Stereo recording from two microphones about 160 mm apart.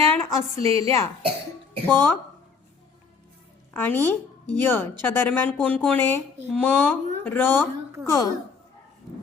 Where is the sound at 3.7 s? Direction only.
10° left (ahead or behind).